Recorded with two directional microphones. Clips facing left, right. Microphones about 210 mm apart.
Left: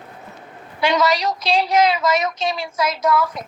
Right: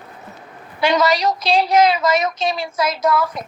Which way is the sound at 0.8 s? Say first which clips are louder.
Right 2 dB; 35° right (ahead or behind).